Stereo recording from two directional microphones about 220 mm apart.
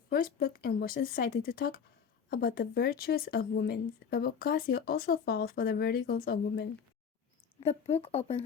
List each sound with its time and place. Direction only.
0.1 s speech: 40° left (ahead or behind)
7.7 s speech: 30° left (ahead or behind)